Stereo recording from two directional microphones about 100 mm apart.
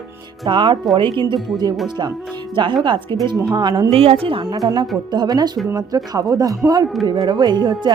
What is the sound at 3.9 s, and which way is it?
Speech, 75° right (ahead or behind).